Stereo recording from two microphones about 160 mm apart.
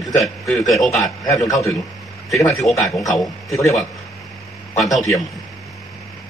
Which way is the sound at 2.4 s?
20° left (ahead or behind).